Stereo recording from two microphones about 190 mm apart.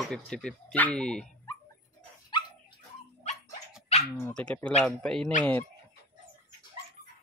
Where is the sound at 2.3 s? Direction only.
25° left (ahead or behind).